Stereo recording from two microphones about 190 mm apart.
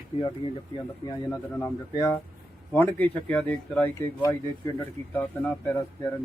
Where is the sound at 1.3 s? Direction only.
15° left (ahead or behind).